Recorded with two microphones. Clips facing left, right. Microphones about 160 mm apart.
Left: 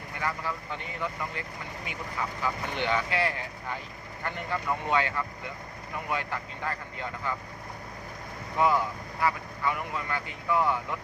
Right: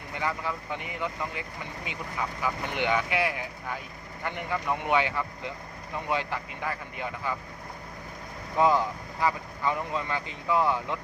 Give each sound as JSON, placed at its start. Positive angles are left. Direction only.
{"t": 0.1, "sound": "speech", "side_deg": -15}
{"t": 8.5, "sound": "speech", "side_deg": -25}